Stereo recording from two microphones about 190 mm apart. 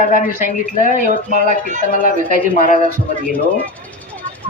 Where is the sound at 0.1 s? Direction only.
45° left (ahead or behind).